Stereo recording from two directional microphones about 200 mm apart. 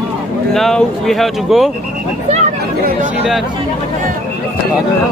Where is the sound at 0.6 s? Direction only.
Centre (ahead or behind).